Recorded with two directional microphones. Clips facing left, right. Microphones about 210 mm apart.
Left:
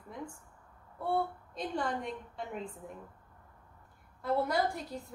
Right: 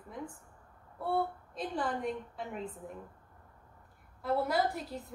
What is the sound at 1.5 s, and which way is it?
A woman's voice, centre (ahead or behind).